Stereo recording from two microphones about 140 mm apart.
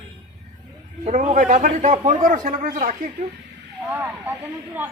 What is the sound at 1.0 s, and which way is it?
A man's voice, 60° right (ahead or behind).